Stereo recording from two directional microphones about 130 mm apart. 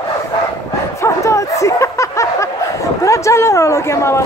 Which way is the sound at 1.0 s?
25° left (ahead or behind).